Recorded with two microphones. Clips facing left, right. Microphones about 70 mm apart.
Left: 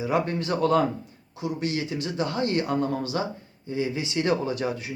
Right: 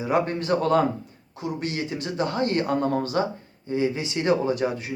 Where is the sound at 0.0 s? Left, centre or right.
Right.